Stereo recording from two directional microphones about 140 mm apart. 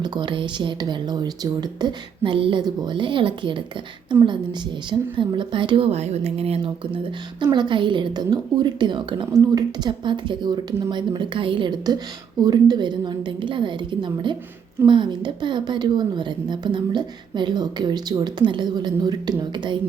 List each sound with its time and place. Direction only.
0.0 s a woman's voice: 30° right (ahead or behind)
7.4 s a woman's voice: 35° right (ahead or behind)